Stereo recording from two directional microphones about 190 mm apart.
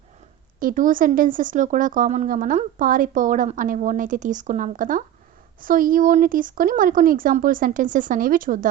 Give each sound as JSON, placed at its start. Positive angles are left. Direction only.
{"t": 0.6, "sound": "speech", "side_deg": -45}